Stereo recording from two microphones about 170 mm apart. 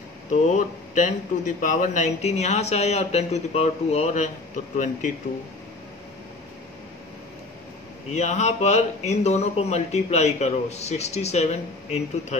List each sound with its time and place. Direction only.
0.3 s a man's voice: 45° left (ahead or behind)
8.1 s a man's voice: 40° left (ahead or behind)